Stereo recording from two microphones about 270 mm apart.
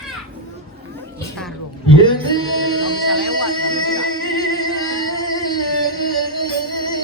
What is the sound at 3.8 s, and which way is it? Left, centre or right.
Music, centre.